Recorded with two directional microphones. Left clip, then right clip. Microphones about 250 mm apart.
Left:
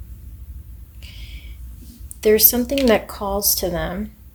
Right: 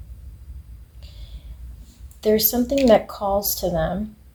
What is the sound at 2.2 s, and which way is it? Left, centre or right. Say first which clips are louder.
Speech: left 3 dB; left.